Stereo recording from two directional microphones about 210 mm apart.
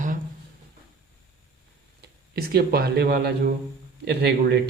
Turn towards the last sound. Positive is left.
turn(degrees=-50)  # may be behind; listen again after turning